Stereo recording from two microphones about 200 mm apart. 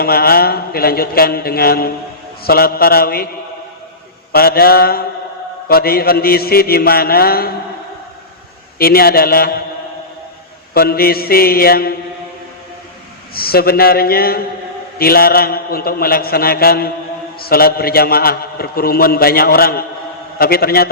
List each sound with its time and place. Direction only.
0.0 s a man's voice: 50° left (ahead or behind)
4.3 s a man's voice: 50° left (ahead or behind)
8.8 s a man's voice: 50° left (ahead or behind)
10.8 s a man's voice: 50° left (ahead or behind)
13.3 s a man's voice: 50° left (ahead or behind)